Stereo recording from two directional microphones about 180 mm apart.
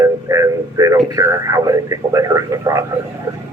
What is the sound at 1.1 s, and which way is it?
Speech, 20° right (ahead or behind).